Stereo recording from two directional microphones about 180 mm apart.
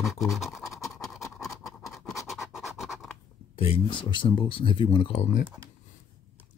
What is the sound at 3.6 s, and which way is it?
Speech, 30° left (ahead or behind).